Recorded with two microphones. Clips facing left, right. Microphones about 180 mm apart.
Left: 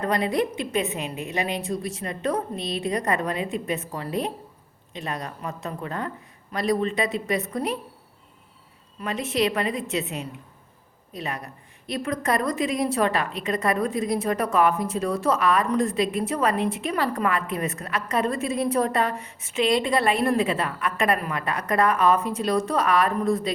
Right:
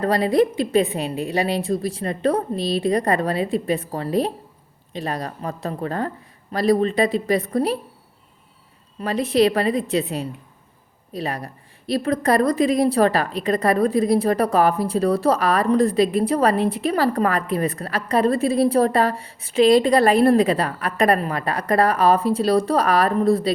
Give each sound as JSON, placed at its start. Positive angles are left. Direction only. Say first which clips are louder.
{"t": 0.0, "sound": "a woman's voice", "louder": "right 6 dB", "side_deg": -35}
{"t": 9.0, "sound": "a woman's voice", "louder": "right 7 dB", "side_deg": -35}